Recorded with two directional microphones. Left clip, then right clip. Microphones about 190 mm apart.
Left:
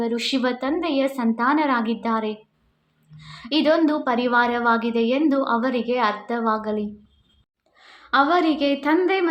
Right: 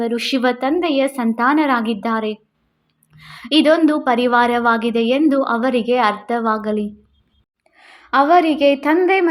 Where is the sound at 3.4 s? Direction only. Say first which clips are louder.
Right 5 dB; 35° right (ahead or behind).